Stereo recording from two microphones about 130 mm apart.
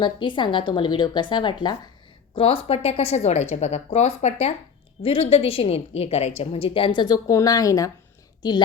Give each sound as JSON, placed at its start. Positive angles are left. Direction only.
{"t": 0.0, "sound": "a woman's voice", "side_deg": 40}
{"t": 5.0, "sound": "a woman's voice", "side_deg": 45}